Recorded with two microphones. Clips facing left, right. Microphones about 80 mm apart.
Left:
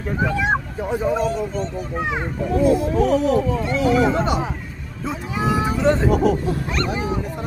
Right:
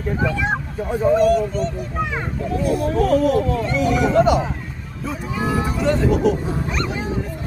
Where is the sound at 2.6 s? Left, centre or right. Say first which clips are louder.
Left 2 dB; left.